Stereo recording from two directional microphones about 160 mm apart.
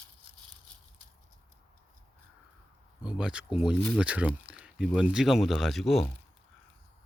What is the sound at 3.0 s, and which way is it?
Speech, 5° right (ahead or behind).